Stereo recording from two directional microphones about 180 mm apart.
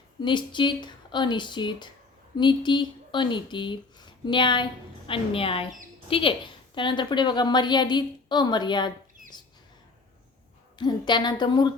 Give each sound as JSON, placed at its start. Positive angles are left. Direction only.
{"t": 0.2, "sound": "speech", "side_deg": 25}
{"t": 10.8, "sound": "speech", "side_deg": 25}